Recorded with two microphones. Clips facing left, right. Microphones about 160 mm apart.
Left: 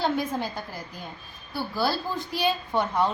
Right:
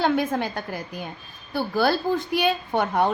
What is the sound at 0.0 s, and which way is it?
A woman's voice, 65° right (ahead or behind).